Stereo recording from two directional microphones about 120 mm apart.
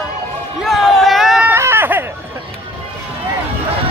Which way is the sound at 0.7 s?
Centre (ahead or behind).